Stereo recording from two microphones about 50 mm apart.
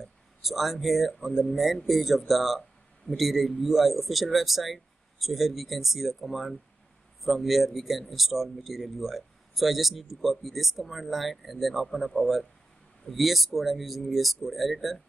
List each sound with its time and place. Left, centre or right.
0.0 s speech: centre